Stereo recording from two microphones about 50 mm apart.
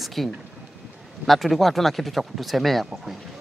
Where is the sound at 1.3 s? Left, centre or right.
Centre.